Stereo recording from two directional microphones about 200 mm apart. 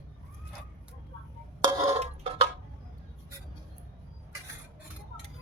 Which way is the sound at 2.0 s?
30° right (ahead or behind).